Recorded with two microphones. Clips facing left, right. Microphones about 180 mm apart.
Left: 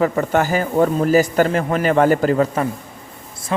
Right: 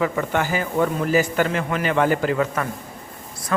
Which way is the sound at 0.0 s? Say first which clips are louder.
Left 5 dB; 40° left (ahead or behind).